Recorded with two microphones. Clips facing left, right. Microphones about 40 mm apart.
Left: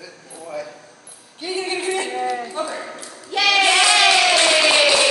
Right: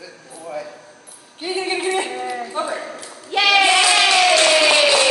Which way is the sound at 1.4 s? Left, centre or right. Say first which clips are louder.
Right 2 dB; centre.